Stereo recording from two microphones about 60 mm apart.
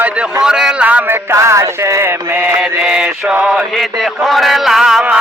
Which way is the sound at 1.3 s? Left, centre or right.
Right.